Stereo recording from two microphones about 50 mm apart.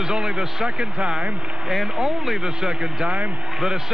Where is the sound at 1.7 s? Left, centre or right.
Centre.